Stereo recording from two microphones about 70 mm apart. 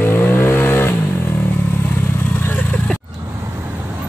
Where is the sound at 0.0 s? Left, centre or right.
Left.